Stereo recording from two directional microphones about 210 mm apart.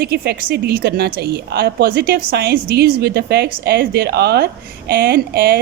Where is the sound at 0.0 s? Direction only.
50° right (ahead or behind).